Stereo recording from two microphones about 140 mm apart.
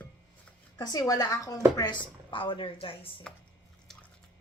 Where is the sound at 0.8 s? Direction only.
25° left (ahead or behind).